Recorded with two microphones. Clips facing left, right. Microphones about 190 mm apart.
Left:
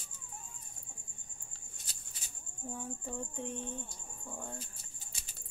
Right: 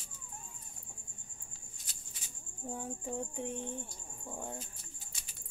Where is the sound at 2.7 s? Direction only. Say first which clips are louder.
Right 2 dB; 15° right (ahead or behind).